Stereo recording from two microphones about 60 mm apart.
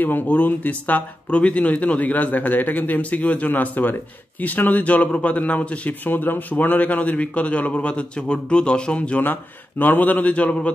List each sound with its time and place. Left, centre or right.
0.0 s speech: left